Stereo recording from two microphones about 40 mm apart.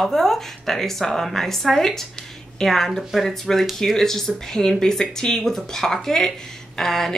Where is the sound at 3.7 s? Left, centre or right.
Centre.